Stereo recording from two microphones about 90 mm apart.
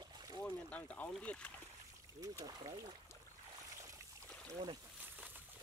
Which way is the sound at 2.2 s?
40° right (ahead or behind).